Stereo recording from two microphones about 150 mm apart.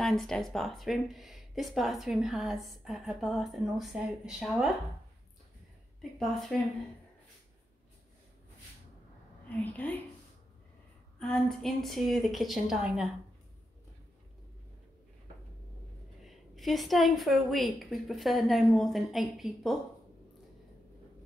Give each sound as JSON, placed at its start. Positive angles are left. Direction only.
{"t": 0.0, "sound": "speech", "side_deg": 5}
{"t": 6.1, "sound": "speech", "side_deg": 0}
{"t": 9.5, "sound": "a woman's voice", "side_deg": 10}
{"t": 11.1, "sound": "speech", "side_deg": 5}
{"t": 16.3, "sound": "speech", "side_deg": 0}